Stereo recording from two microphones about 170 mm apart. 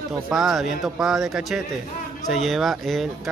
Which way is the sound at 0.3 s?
Centre (ahead or behind).